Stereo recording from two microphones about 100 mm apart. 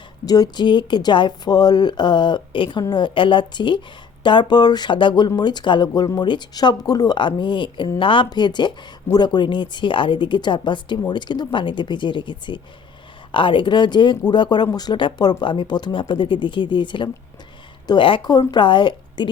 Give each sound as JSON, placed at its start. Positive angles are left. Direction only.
{"t": 0.3, "sound": "a woman's voice", "side_deg": 40}
{"t": 18.3, "sound": "a woman's voice", "side_deg": 45}